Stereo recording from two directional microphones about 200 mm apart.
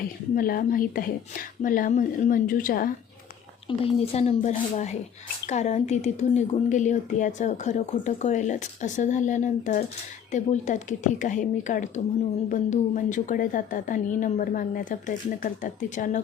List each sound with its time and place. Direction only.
0.3 s speech: 45° left (ahead or behind)
3.7 s a woman's voice: 30° left (ahead or behind)